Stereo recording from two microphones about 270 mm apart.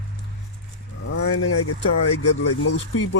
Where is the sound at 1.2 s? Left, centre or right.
Left.